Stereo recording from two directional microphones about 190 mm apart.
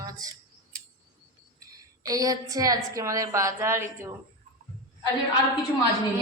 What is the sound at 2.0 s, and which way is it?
A woman's voice, 20° right (ahead or behind).